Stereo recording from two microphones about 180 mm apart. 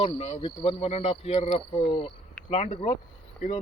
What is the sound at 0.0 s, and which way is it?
Speech, 35° left (ahead or behind).